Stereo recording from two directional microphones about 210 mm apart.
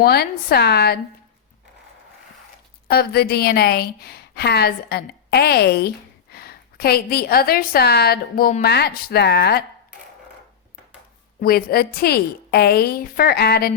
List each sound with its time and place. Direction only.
0.0 s a woman's voice: 50° left (ahead or behind)
2.8 s a woman's voice: 50° left (ahead or behind)
11.3 s a woman's voice: 45° left (ahead or behind)